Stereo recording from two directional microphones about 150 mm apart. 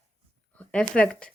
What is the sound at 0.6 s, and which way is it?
Speech, 10° left (ahead or behind).